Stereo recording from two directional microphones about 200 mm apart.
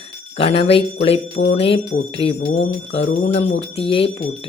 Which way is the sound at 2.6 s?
60° left (ahead or behind).